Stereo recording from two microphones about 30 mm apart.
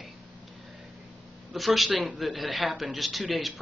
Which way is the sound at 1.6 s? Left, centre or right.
Centre.